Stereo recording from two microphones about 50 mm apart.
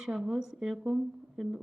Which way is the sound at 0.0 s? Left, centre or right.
Centre.